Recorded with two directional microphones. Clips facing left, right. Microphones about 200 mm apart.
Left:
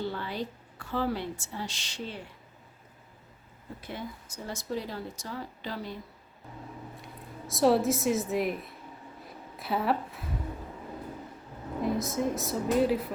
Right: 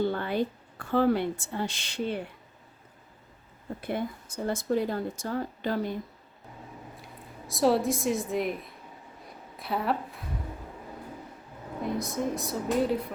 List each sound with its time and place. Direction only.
0.0 s a woman's voice: 55° right (ahead or behind)
3.8 s speech: 55° right (ahead or behind)
6.9 s a woman's voice: centre (ahead or behind)
11.8 s a woman's voice: centre (ahead or behind)